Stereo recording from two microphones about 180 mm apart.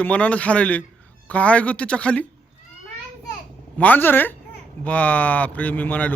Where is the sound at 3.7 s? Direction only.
10° left (ahead or behind).